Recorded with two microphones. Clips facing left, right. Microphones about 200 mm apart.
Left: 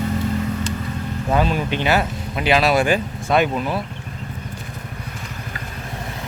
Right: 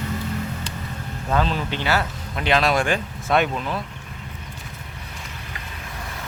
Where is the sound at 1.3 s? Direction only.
10° left (ahead or behind).